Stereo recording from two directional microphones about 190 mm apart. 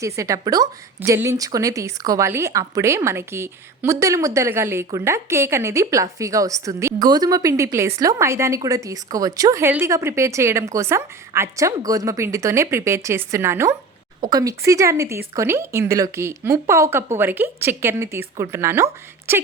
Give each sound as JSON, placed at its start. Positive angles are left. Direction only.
{"t": 0.0, "sound": "a woman's voice", "side_deg": -15}